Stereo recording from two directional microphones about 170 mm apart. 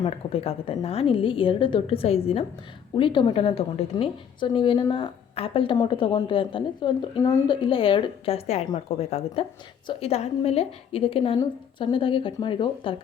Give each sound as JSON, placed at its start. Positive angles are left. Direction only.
{"t": 0.0, "sound": "a woman's voice", "side_deg": 35}